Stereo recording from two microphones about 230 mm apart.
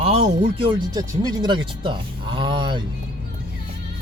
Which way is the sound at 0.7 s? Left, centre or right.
Centre.